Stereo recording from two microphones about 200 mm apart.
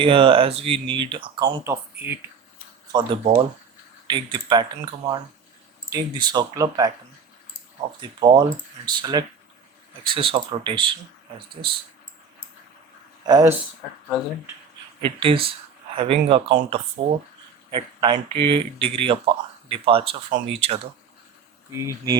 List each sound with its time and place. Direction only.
0.0 s speech: 25° right (ahead or behind)
1.6 s speech: 10° right (ahead or behind)
2.9 s speech: 25° right (ahead or behind)
5.9 s speech: 20° right (ahead or behind)
13.2 s speech: 15° right (ahead or behind)
15.0 s speech: 25° right (ahead or behind)